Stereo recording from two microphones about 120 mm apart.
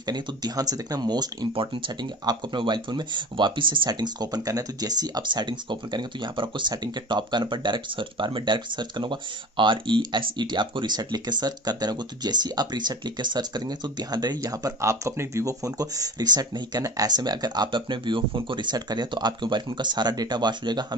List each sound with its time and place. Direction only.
0.0 s speech: 35° right (ahead or behind)
1.5 s speech: 45° right (ahead or behind)